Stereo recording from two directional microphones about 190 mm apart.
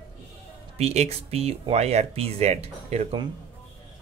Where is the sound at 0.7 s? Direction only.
35° right (ahead or behind).